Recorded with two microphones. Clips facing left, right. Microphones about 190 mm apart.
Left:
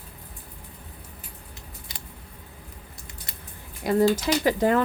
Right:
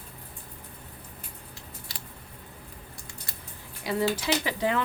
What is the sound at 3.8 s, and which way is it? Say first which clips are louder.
Speech: left 7 dB; 50° left (ahead or behind).